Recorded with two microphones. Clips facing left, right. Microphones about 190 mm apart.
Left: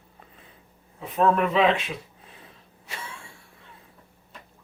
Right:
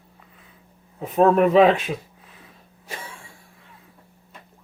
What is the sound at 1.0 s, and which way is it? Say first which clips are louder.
Speech: right 5 dB; 45° right (ahead or behind).